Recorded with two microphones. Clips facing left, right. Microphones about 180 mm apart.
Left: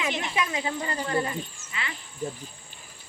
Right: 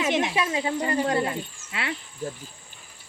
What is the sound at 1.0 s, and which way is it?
Speech, 70° right (ahead or behind).